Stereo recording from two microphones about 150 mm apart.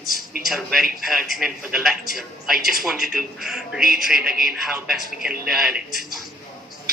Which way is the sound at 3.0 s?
90° right.